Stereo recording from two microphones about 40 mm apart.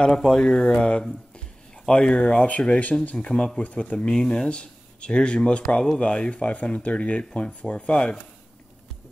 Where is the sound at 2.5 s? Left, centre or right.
Left.